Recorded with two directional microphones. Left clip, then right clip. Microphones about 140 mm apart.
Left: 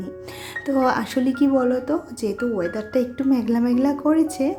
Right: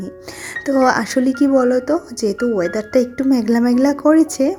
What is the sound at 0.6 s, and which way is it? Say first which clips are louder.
A woman's voice: right 6 dB; 50° right (ahead or behind).